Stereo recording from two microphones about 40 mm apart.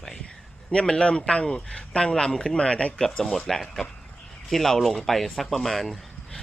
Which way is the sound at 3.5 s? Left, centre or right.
Centre.